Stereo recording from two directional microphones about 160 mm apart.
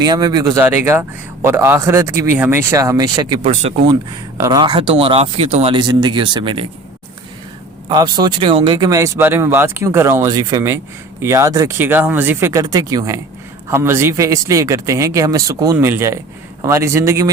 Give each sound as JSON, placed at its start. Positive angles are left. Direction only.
{"t": 0.0, "sound": "speech", "side_deg": -25}
{"t": 0.6, "sound": "speech", "side_deg": -15}
{"t": 3.5, "sound": "speech", "side_deg": -40}
{"t": 4.4, "sound": "speech", "side_deg": -25}
{"t": 5.8, "sound": "speech", "side_deg": -25}
{"t": 7.9, "sound": "speech", "side_deg": -30}